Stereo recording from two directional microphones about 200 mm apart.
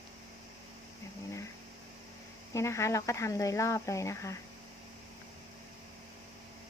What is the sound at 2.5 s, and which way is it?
Speech, 15° left (ahead or behind).